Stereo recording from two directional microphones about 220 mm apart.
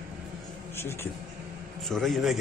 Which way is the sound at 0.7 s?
10° left (ahead or behind).